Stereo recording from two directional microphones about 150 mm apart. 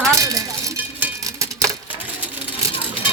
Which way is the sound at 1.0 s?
20° right (ahead or behind).